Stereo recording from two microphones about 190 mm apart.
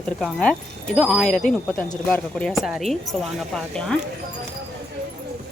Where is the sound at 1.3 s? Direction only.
40° left (ahead or behind).